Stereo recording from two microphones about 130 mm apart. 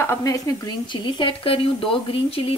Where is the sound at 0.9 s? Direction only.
40° left (ahead or behind).